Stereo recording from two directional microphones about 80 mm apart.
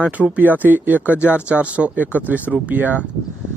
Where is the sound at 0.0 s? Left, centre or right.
Centre.